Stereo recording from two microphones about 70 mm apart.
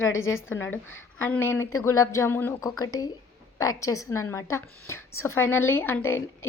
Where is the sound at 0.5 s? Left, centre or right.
Left.